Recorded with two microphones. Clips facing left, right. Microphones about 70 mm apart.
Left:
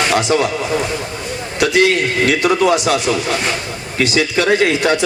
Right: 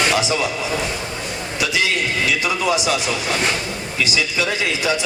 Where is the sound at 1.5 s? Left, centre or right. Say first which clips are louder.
Left 8 dB; left.